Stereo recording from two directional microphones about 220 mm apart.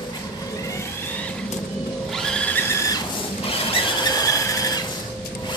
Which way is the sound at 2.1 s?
5° left (ahead or behind).